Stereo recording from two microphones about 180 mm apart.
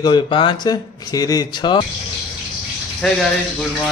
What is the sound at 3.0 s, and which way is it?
Speech, 5° left (ahead or behind).